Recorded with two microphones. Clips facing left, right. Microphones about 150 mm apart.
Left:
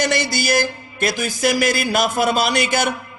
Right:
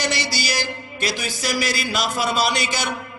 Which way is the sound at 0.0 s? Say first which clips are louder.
Left 5 dB; 50° left (ahead or behind).